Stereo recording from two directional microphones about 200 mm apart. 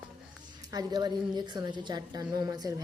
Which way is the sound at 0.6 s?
20° right (ahead or behind).